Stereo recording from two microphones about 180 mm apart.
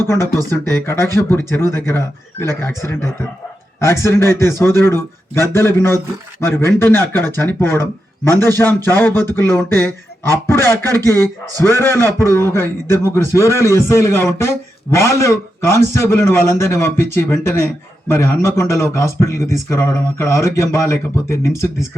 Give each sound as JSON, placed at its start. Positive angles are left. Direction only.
{"t": 0.0, "sound": "a man's voice", "side_deg": 15}